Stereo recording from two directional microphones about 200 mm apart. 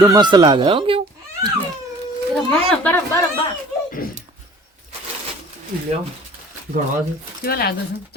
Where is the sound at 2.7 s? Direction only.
10° left (ahead or behind).